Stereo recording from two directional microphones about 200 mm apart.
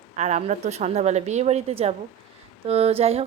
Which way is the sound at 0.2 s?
35° right (ahead or behind).